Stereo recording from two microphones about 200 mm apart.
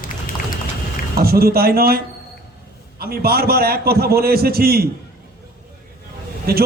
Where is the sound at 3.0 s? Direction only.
50° right (ahead or behind).